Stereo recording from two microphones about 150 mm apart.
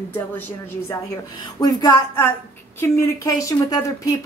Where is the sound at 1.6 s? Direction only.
25° left (ahead or behind).